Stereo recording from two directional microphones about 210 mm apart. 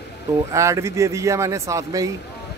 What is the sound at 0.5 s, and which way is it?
Speech, 15° right (ahead or behind).